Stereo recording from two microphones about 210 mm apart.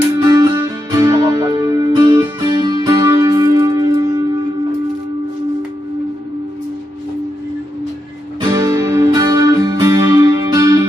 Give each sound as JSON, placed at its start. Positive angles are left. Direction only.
{"t": 0.2, "sound": "music", "side_deg": -15}
{"t": 8.5, "sound": "music", "side_deg": -15}